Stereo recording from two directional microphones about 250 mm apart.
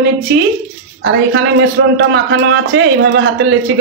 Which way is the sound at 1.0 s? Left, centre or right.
Right.